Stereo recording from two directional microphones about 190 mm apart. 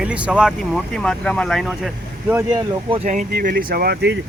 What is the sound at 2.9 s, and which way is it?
Speech, 40° right (ahead or behind).